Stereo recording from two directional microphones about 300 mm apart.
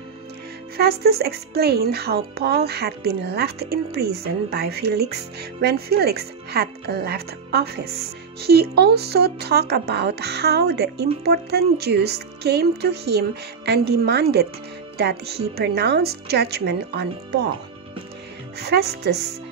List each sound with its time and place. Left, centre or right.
0.7 s speech: right
18.6 s speech: right